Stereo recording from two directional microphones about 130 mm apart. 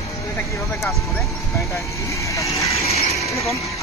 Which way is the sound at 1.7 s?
25° left (ahead or behind).